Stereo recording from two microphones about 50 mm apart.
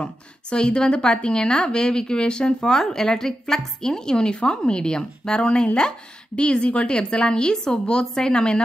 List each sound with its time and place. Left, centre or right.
0.0 s a woman's voice: centre